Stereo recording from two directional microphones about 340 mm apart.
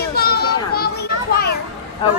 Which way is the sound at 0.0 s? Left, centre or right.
Left.